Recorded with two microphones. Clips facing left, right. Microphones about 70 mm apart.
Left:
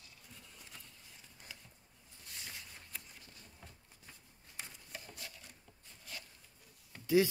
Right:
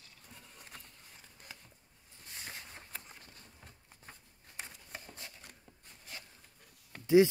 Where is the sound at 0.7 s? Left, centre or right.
Right.